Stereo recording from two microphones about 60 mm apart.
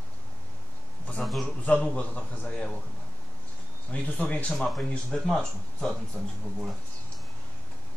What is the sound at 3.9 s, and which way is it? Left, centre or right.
Speech, left.